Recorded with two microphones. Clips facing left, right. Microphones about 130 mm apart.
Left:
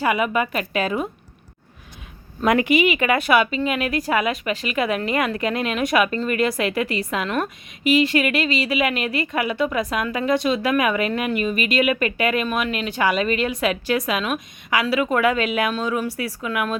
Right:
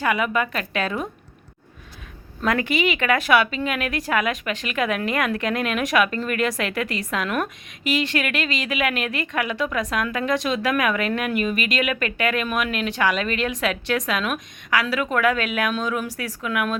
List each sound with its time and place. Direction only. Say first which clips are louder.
0.0 s a woman's voice: left 2 dB; 10° left (ahead or behind)
2.4 s a woman's voice: left 4 dB; 15° left (ahead or behind)